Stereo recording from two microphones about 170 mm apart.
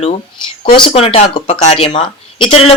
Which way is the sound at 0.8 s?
35° left (ahead or behind).